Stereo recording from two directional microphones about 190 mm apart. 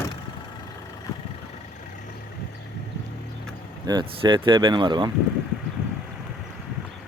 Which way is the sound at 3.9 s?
25° right (ahead or behind).